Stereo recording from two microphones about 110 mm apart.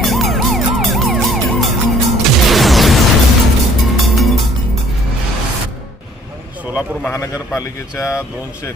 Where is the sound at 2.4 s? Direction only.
Centre (ahead or behind).